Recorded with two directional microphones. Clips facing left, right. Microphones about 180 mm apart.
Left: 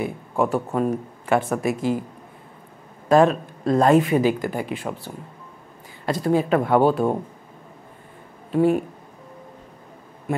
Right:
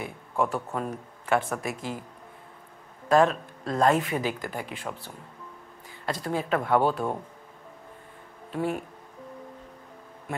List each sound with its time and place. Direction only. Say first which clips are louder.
0.0 s speech: left 5 dB; 15° left (ahead or behind)
3.1 s speech: left 5 dB; 15° left (ahead or behind)
7.0 s speech: left 8 dB; 30° left (ahead or behind)
8.5 s speech: left 10 dB; 15° left (ahead or behind)